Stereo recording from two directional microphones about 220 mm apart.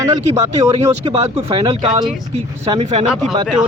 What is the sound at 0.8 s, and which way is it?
Speech, 25° right (ahead or behind).